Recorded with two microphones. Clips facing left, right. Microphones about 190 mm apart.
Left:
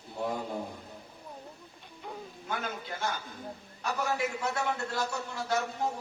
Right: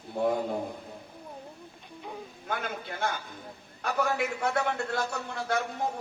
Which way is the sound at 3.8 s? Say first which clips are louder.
Right 3 dB; 60° right (ahead or behind).